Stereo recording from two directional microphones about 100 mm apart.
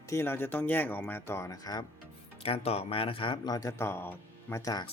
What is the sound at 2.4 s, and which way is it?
Speech, 80° left.